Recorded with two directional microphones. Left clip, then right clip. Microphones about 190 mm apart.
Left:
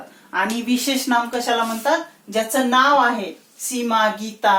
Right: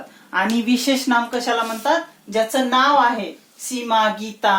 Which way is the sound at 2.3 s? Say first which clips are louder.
Even; 15° right (ahead or behind).